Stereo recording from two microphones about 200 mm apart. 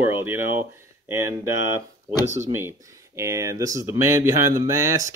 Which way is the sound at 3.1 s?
15° right (ahead or behind).